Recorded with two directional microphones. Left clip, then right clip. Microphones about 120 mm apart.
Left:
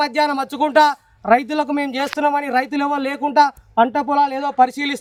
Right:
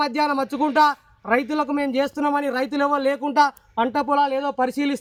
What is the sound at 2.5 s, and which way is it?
Speech, 10° left (ahead or behind).